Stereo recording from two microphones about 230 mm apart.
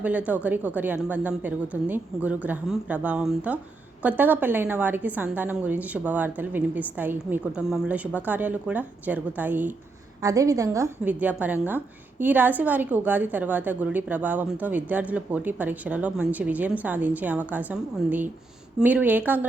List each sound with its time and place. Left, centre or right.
0.0 s a woman's voice: centre